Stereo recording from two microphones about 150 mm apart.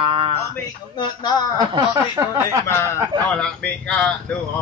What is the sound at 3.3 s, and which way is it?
Speech, 5° left (ahead or behind).